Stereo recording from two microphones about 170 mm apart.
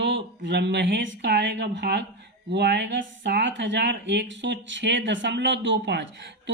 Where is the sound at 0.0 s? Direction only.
90° right.